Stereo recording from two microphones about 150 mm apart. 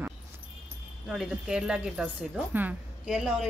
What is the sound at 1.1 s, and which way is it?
A woman's voice, 5° right (ahead or behind).